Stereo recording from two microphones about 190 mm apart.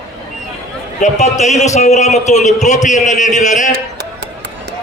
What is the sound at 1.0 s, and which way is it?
A man's voice, 35° left (ahead or behind).